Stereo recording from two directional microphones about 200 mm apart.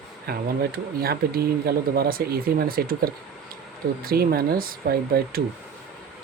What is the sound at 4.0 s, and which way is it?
Speech, 50° right (ahead or behind).